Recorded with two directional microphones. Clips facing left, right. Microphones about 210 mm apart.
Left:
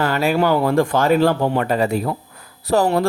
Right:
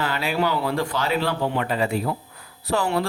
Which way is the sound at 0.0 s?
45° left (ahead or behind).